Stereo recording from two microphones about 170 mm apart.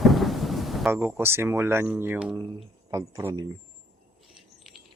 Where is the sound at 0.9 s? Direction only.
15° right (ahead or behind).